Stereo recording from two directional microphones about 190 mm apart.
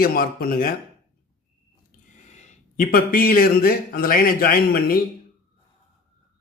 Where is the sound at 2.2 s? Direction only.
35° left (ahead or behind).